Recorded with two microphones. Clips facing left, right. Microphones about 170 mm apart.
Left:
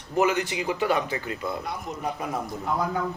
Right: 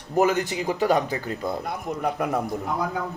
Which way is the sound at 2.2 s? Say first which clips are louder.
Right 6 dB; 65° right (ahead or behind).